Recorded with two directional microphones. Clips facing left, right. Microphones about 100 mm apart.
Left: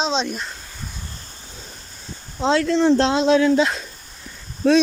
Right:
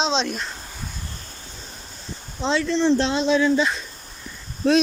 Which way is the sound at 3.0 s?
90° left.